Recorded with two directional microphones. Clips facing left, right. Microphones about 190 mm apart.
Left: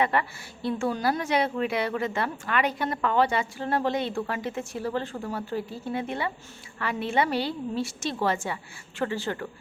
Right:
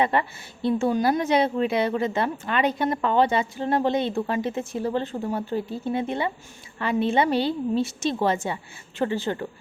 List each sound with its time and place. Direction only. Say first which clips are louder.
0.0 s a woman's voice: right 2 dB; 25° right (ahead or behind)